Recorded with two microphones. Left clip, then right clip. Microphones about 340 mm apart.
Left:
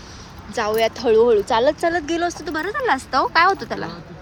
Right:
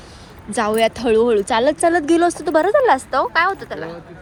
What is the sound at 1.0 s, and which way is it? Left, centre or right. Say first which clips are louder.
A woman's voice: left 4 dB; centre.